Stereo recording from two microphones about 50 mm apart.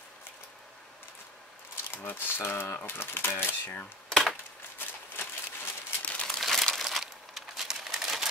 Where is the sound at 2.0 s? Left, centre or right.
Left.